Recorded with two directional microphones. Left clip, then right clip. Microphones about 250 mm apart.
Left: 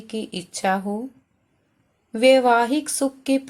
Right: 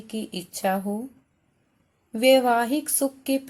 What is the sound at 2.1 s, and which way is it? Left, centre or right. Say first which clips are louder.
Speech: left 3 dB; centre.